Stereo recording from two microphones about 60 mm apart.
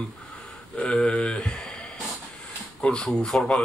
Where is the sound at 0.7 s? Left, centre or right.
Left.